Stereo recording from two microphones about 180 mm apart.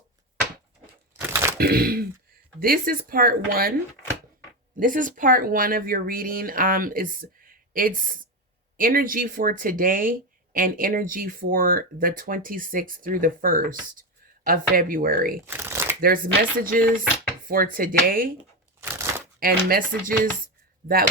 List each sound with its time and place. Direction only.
1.1 s a sound: 15° right (ahead or behind)
1.5 s speech: 55° right (ahead or behind)
4.8 s speech: 45° right (ahead or behind)
15.4 s shuffling cards: 15° right (ahead or behind)
16.0 s speech: 55° right (ahead or behind)
18.8 s crunch: 15° right (ahead or behind)
19.4 s speech: 55° right (ahead or behind)